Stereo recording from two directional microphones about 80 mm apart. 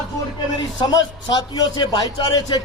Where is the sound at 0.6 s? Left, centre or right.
Left.